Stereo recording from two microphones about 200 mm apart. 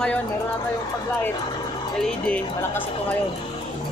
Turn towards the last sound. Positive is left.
turn(degrees=5)  # may be behind; listen again after turning